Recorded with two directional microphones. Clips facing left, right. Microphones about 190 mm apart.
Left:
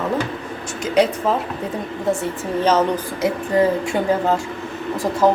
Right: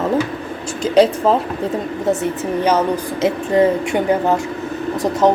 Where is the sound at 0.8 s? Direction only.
30° right (ahead or behind).